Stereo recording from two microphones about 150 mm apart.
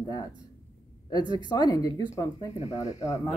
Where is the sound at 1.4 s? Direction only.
25° left (ahead or behind).